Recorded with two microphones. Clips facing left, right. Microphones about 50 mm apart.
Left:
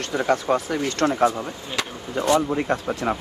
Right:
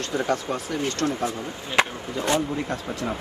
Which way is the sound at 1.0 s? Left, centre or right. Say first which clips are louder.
Left 9 dB; left.